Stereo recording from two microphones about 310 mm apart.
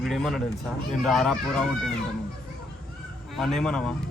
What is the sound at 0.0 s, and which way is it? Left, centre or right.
Speech, centre.